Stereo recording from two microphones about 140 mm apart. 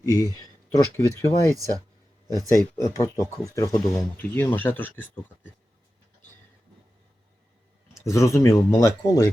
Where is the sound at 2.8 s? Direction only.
25° left (ahead or behind).